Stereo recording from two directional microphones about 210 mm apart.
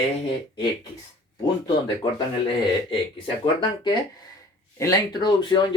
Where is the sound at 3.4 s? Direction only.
20° left (ahead or behind).